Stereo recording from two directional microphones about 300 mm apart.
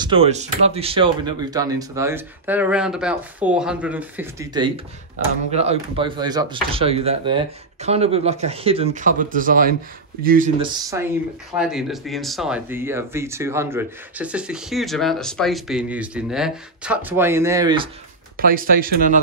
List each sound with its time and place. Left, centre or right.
0.0 s speech: centre
10.6 s speech: centre
18.4 s speech: right